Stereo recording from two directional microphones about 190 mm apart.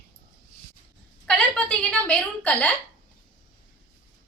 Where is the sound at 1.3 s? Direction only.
5° left (ahead or behind).